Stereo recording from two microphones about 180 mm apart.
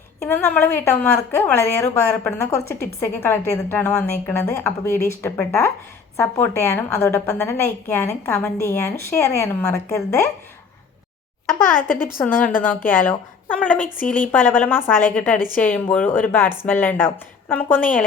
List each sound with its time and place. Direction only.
0.2 s a woman's voice: 10° left (ahead or behind)
11.6 s a woman's voice: 10° left (ahead or behind)